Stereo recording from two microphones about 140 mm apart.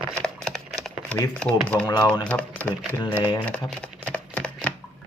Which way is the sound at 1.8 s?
30° left (ahead or behind).